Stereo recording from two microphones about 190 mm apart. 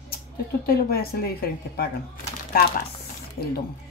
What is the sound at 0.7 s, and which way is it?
Speech, 55° left (ahead or behind).